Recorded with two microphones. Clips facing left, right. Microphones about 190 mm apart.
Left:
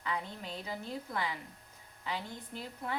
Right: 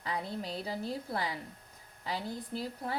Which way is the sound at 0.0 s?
35° right (ahead or behind).